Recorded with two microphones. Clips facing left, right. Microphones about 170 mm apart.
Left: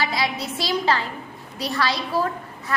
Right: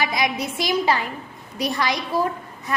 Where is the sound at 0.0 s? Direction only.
15° right (ahead or behind).